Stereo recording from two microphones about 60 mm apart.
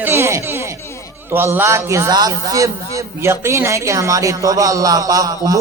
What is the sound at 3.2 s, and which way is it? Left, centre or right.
A man's voice, right.